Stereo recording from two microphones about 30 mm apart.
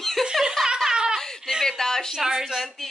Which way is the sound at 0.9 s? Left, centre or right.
Right.